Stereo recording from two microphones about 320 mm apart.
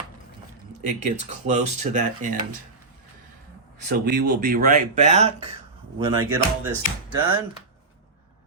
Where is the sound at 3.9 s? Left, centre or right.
Right; by 6.2 s centre.